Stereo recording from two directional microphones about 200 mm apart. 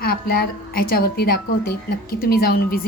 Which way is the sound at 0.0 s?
50° left (ahead or behind).